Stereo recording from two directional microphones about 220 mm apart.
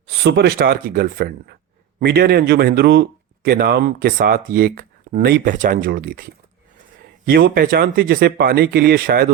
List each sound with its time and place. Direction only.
0.1 s speech: 50° right (ahead or behind)
7.3 s speech: 45° right (ahead or behind)